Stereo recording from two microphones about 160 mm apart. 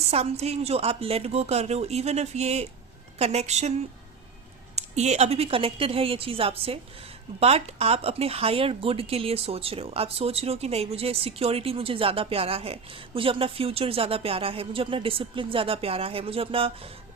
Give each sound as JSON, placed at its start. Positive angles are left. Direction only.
{"t": 0.1, "sound": "a woman's voice", "side_deg": -40}
{"t": 4.7, "sound": "speech", "side_deg": -45}